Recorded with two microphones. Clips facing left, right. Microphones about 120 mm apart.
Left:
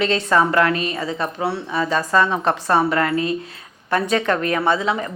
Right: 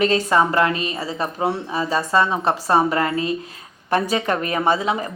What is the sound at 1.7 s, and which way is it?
Speech, 30° right (ahead or behind).